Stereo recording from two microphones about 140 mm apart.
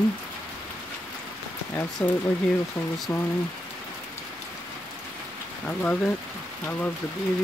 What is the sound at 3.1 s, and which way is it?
Speech, 20° left (ahead or behind).